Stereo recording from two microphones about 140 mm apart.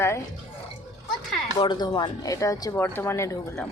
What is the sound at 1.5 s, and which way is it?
Speech, 30° left (ahead or behind).